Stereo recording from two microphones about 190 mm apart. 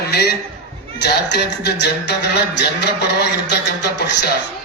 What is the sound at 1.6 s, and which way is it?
A man's voice, 60° left (ahead or behind).